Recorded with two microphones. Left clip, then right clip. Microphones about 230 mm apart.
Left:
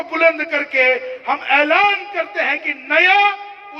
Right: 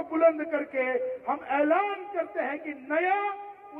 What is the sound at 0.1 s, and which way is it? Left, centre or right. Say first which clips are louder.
Speech: left 8 dB; left.